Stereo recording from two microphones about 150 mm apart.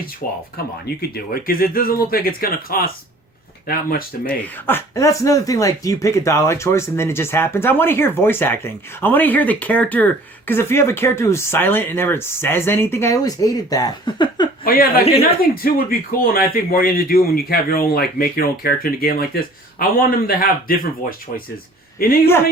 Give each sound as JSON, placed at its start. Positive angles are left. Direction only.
{"t": 1.1, "sound": "speech", "side_deg": 80}
{"t": 4.3, "sound": "speech", "side_deg": 15}
{"t": 14.6, "sound": "speech", "side_deg": 75}
{"t": 21.9, "sound": "speech", "side_deg": 80}